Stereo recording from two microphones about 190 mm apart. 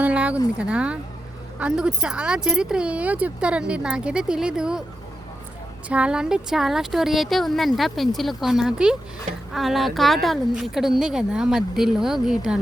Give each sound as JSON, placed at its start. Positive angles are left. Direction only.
{"t": 0.0, "sound": "a sound", "side_deg": -5}
{"t": 0.6, "sound": "speech", "side_deg": -5}
{"t": 5.9, "sound": "speech", "side_deg": -5}